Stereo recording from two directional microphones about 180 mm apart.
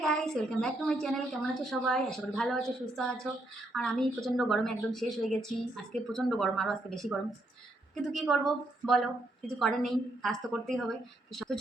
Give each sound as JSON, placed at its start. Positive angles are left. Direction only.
{"t": 0.0, "sound": "a woman's voice", "side_deg": 5}